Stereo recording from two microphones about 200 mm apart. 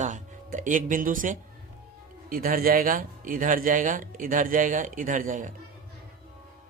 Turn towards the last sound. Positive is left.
turn(degrees=-40)  # may be behind; listen again after turning